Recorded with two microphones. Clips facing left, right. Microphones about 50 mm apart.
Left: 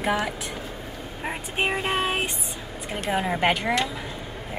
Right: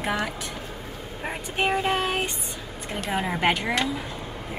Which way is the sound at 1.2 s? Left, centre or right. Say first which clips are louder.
Even; centre.